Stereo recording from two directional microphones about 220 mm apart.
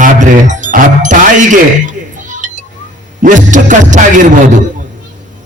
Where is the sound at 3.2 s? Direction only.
35° right (ahead or behind).